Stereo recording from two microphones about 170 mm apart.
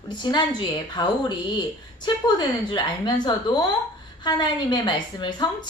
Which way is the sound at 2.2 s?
25° left (ahead or behind).